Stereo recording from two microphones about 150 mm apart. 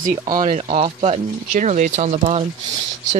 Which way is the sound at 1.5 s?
55° right (ahead or behind).